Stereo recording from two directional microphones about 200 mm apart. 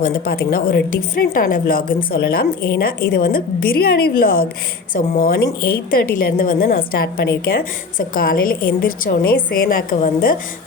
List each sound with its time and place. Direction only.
0.0 s a woman's voice: 45° left (ahead or behind)